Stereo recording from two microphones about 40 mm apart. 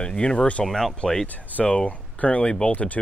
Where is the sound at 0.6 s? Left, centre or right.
Centre.